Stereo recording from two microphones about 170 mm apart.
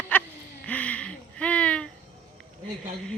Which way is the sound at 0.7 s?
10° left (ahead or behind).